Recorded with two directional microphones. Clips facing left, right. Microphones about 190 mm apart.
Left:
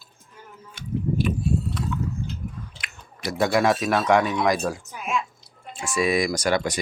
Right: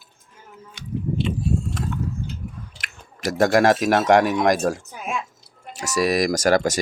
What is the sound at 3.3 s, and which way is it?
Speech, 45° right (ahead or behind).